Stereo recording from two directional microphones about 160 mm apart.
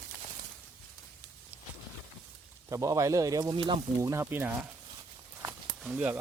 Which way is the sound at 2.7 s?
20° right (ahead or behind).